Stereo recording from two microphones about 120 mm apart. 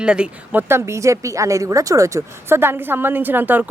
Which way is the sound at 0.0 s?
10° right (ahead or behind).